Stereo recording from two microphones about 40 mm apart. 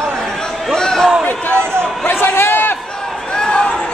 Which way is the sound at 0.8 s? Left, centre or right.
Centre.